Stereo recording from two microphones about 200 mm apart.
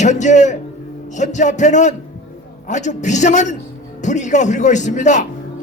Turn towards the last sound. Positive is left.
turn(degrees=35)  # may be behind; listen again after turning